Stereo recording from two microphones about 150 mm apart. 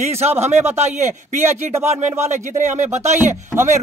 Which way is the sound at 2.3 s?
55° right (ahead or behind).